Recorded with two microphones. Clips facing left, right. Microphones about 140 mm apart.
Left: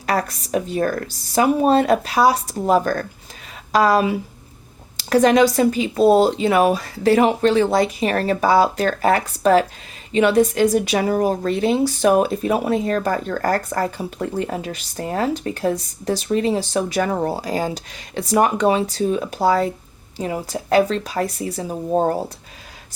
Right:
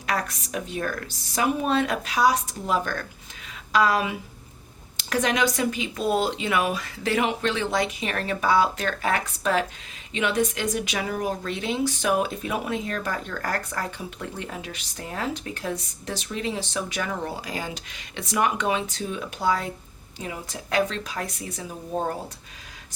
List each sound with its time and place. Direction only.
0.0 s a woman's voice: 35° left (ahead or behind)